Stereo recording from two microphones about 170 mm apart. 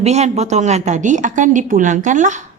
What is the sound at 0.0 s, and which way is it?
A woman's voice, 40° right (ahead or behind).